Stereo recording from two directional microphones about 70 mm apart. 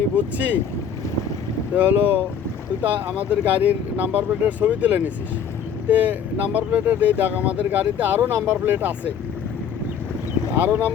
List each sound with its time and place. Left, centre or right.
0.3 s speech: right
1.7 s speech: right
10.5 s speech: right